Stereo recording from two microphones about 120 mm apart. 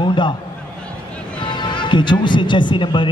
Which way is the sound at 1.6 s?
40° left (ahead or behind).